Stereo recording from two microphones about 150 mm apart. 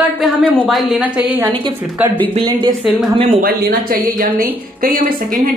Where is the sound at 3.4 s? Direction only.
70° right (ahead or behind).